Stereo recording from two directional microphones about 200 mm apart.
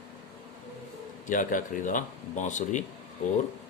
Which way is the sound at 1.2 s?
40° left (ahead or behind).